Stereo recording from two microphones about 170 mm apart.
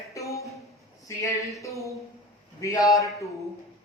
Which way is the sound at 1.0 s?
20° left (ahead or behind).